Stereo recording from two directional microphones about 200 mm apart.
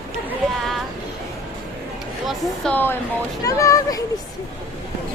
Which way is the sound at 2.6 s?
10° left (ahead or behind).